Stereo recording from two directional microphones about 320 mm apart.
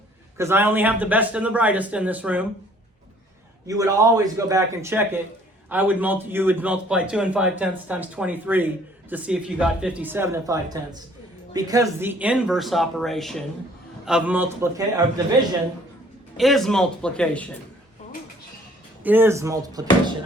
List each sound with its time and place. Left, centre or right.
0.3 s a man's voice: centre
3.7 s a man's voice: centre
16.4 s a man's voice: centre
19.0 s a man's voice: centre